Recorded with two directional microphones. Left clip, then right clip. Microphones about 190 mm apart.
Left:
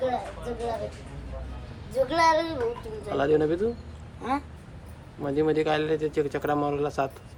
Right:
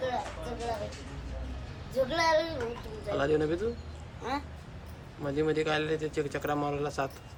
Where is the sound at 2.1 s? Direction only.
25° left (ahead or behind).